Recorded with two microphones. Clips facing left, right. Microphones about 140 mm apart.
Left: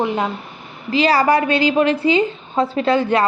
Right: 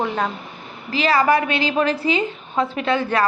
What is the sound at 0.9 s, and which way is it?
A woman's voice, 30° left (ahead or behind).